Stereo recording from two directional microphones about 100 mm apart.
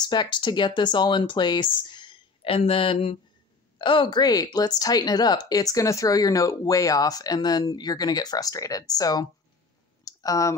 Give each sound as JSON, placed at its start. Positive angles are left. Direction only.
{"t": 0.0, "sound": "speech", "side_deg": 50}
{"t": 2.5, "sound": "speech", "side_deg": 70}
{"t": 3.7, "sound": "a woman's voice", "side_deg": 55}
{"t": 10.0, "sound": "a sound", "side_deg": 35}